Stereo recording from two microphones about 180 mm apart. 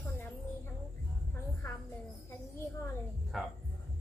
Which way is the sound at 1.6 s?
15° left (ahead or behind).